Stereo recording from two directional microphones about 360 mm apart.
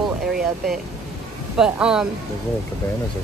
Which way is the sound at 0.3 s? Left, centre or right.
Centre.